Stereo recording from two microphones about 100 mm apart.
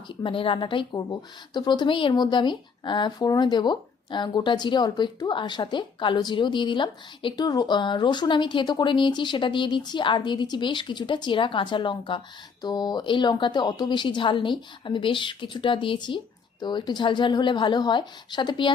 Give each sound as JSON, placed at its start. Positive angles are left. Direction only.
{"t": 0.2, "sound": "speech", "side_deg": 60}
{"t": 0.9, "sound": "speech", "side_deg": 45}
{"t": 7.4, "sound": "speech", "side_deg": 40}
{"t": 12.6, "sound": "speech", "side_deg": 45}